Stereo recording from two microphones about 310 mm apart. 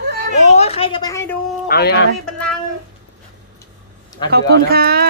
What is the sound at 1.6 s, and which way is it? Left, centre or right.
Speech, left.